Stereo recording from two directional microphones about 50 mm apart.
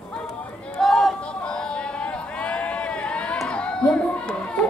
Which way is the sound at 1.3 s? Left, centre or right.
Centre.